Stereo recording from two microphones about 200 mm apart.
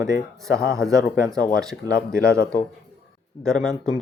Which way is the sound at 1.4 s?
5° left (ahead or behind).